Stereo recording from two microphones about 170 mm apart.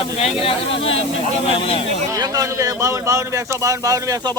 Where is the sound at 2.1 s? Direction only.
20° right (ahead or behind).